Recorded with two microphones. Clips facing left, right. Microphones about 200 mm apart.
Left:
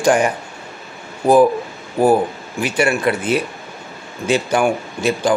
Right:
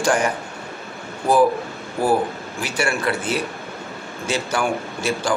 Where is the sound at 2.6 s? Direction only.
20° left (ahead or behind).